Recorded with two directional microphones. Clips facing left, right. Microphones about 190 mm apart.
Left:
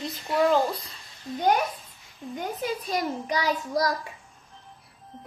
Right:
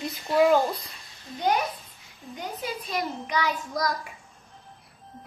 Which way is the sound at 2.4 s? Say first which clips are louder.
Left 3 dB; 45° left (ahead or behind).